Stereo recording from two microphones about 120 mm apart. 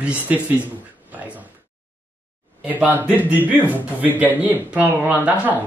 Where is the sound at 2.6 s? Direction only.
15° right (ahead or behind).